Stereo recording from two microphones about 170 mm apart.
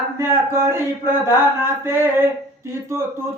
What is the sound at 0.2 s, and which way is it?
Speech, 15° right (ahead or behind).